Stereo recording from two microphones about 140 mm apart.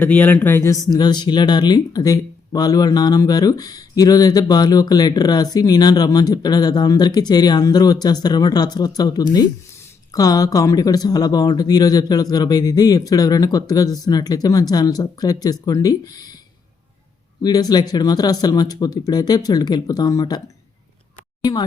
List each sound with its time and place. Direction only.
0.0 s speech: 10° left (ahead or behind); by 16.4 s 25° left (ahead or behind)
17.4 s speech: 30° left (ahead or behind)